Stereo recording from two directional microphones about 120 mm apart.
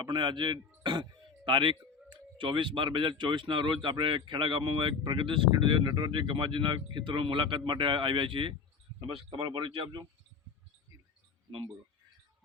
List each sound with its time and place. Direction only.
0.0 s speech: 40° right (ahead or behind)